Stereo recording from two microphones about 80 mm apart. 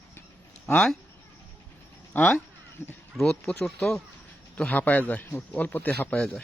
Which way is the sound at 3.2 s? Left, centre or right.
Centre.